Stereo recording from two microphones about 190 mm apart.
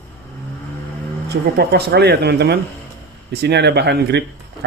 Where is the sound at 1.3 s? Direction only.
60° right (ahead or behind).